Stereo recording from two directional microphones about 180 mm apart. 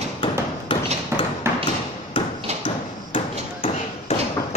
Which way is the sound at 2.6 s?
30° left (ahead or behind).